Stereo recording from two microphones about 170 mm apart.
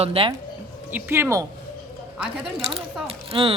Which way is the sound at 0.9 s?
15° right (ahead or behind).